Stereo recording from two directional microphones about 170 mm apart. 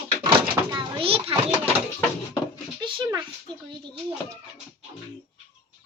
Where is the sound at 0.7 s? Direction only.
30° right (ahead or behind).